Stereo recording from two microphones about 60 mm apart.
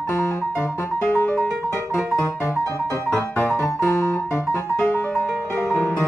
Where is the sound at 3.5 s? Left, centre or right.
Left.